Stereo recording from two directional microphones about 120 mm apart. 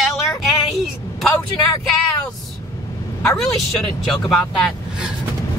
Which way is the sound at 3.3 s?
5° left (ahead or behind).